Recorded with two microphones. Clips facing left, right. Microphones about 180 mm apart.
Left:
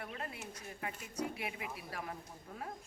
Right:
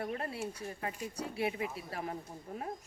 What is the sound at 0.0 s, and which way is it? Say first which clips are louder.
Speech: right 8 dB; 35° right (ahead or behind).